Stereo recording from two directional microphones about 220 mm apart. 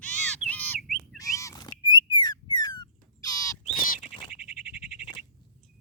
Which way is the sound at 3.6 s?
40° left (ahead or behind).